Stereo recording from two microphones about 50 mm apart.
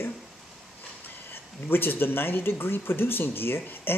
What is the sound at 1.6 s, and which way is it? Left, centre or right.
Speech, left.